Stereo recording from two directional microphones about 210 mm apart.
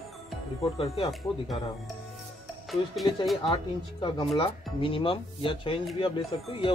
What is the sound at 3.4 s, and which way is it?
Speech, 25° left (ahead or behind).